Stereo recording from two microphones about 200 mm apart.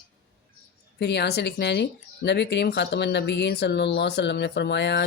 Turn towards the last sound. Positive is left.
turn(degrees=60)  # may be behind; listen again after turning